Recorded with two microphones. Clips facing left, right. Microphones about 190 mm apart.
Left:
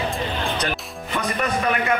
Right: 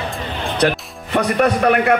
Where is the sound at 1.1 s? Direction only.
65° right (ahead or behind).